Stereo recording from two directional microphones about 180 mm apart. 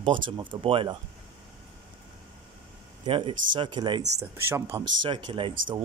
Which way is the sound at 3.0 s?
25° right (ahead or behind).